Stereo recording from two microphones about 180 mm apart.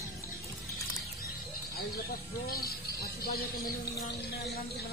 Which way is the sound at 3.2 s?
55° left (ahead or behind).